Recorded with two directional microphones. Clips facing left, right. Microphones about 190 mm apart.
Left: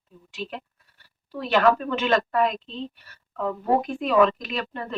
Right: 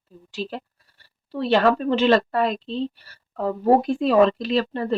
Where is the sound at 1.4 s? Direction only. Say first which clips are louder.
Right 2 dB; 30° right (ahead or behind).